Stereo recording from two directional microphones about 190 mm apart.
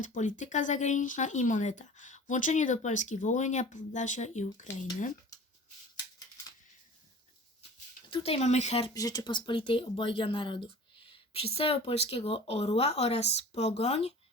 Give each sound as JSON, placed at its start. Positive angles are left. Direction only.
{"t": 0.0, "sound": "speech", "side_deg": 45}
{"t": 8.1, "sound": "speech", "side_deg": 30}
{"t": 8.9, "sound": "speech", "side_deg": 20}